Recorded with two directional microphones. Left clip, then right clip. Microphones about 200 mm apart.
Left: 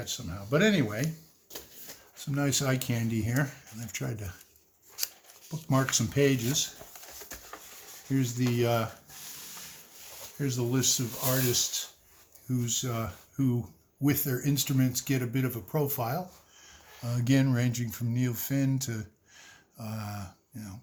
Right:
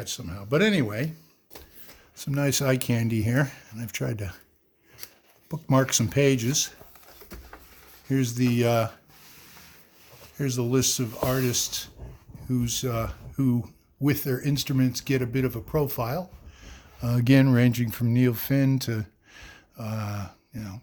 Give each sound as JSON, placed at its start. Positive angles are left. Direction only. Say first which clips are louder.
{"t": 0.0, "sound": "speech", "louder": "right 2 dB", "side_deg": -55}
{"t": 2.1, "sound": "speech", "louder": "right 4 dB", "side_deg": -50}
{"t": 5.5, "sound": "speech", "louder": "right 5 dB", "side_deg": -50}
{"t": 8.1, "sound": "speech", "louder": "right 5 dB", "side_deg": -55}
{"t": 10.3, "sound": "speech", "louder": "right 5 dB", "side_deg": -55}